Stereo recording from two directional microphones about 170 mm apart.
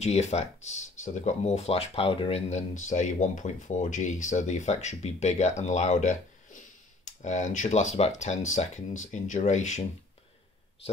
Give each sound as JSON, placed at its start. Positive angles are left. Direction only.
{"t": 0.0, "sound": "speech", "side_deg": 40}